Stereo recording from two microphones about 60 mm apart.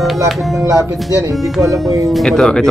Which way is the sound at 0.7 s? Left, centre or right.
Right.